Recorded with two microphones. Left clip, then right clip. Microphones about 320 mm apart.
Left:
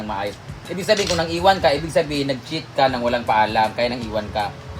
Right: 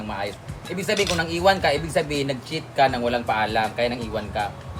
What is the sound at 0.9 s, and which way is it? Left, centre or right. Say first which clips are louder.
Speech: left 4 dB; centre.